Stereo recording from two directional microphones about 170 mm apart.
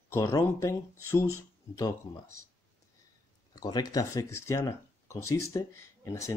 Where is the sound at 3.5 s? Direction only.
25° left (ahead or behind).